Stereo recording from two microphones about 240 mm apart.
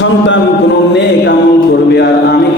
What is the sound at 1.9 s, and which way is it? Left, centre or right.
Speech, left.